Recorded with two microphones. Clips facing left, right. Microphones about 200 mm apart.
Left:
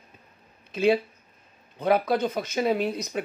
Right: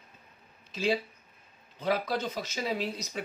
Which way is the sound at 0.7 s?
60° left (ahead or behind).